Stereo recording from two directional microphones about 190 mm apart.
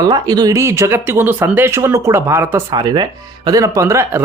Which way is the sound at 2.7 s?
20° right (ahead or behind).